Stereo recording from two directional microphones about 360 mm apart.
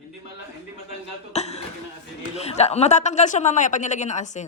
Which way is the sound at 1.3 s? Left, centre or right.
Centre.